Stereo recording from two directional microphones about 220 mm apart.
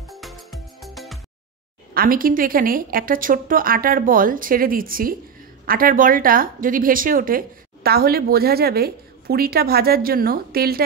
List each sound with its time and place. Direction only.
0.1 s music: centre (ahead or behind)
2.0 s a woman's voice: 40° right (ahead or behind)